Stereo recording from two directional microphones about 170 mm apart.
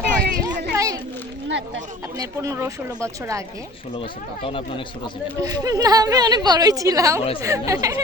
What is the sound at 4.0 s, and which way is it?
A man's voice, 30° left (ahead or behind).